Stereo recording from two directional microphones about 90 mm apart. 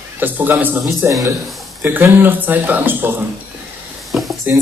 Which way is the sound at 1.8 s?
20° right (ahead or behind).